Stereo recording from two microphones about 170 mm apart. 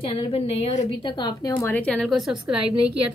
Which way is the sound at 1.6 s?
10° left (ahead or behind).